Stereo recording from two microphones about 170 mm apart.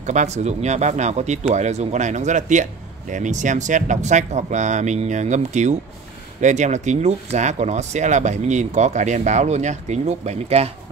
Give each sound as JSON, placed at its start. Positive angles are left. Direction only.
{"t": 0.0, "sound": "speech", "side_deg": -45}